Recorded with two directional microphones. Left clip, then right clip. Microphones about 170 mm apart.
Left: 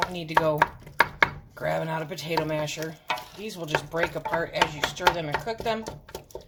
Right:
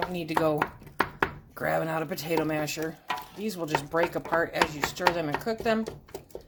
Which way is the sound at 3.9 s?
40° right (ahead or behind).